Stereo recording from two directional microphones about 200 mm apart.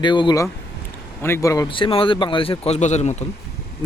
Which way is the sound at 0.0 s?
20° left (ahead or behind).